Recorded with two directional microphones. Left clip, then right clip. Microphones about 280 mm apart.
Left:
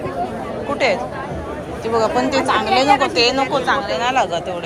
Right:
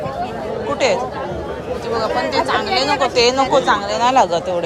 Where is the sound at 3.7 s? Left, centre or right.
Centre.